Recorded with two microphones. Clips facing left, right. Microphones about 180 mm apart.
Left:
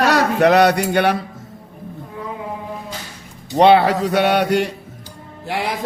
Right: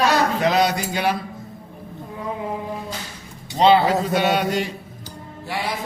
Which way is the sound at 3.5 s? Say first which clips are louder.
Left 3 dB; 65° left (ahead or behind).